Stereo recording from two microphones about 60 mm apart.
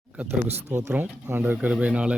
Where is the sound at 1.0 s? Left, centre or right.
Right.